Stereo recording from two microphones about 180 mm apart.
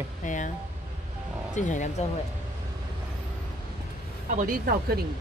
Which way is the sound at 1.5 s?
45° left (ahead or behind).